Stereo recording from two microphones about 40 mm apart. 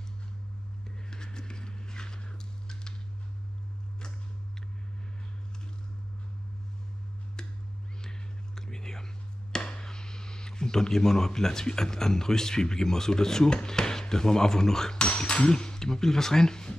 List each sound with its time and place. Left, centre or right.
1.1 s vehicle: centre
8.0 s whispering: centre
9.5 s speech: centre
15.0 s speech: left